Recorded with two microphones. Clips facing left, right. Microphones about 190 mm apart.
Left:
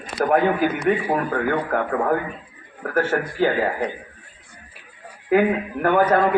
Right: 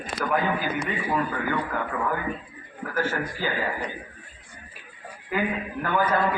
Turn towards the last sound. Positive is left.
turn(degrees=55)  # may be behind; listen again after turning